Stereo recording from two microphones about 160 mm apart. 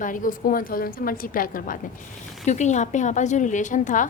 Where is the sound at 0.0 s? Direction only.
55° left (ahead or behind).